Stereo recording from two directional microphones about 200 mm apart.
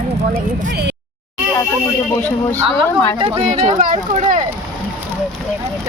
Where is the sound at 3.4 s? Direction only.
35° right (ahead or behind).